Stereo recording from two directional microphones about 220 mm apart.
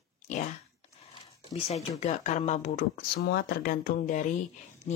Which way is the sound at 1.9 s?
30° left (ahead or behind).